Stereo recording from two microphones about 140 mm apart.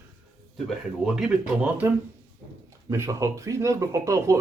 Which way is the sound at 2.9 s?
20° right (ahead or behind).